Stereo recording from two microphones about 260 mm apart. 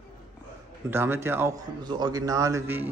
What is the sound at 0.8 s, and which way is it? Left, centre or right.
Speech, centre.